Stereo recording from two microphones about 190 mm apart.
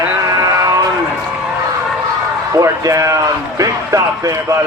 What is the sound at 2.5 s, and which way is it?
Speech, 15° right (ahead or behind).